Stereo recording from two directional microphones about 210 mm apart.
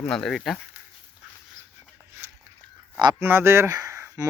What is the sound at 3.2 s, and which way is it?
Speech, 10° right (ahead or behind).